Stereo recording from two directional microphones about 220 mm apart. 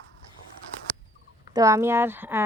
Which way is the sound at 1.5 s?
15° right (ahead or behind).